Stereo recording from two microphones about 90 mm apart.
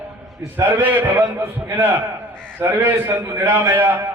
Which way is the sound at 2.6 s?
20° right (ahead or behind).